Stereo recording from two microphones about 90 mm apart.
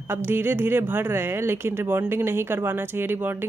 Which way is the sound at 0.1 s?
25° right (ahead or behind).